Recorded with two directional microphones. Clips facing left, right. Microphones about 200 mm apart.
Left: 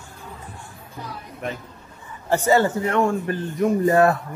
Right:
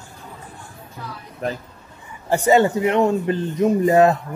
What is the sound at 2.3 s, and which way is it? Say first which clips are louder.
A man's voice: right 3 dB; 15° right (ahead or behind).